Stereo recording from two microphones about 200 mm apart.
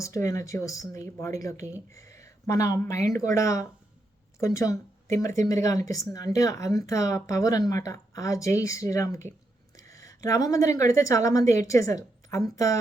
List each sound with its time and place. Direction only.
0.0 s a woman's voice: 15° left (ahead or behind)